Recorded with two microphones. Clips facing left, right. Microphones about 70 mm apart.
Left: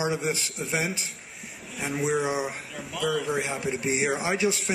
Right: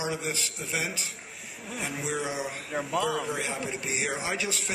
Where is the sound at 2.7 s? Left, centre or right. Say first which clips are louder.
Right 4 dB; right.